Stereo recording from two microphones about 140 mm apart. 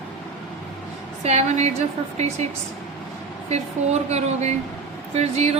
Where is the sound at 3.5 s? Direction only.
50° right (ahead or behind).